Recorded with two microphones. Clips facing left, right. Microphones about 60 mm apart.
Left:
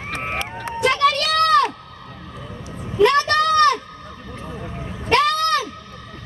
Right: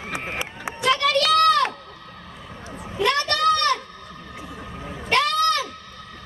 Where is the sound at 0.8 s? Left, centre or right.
Left.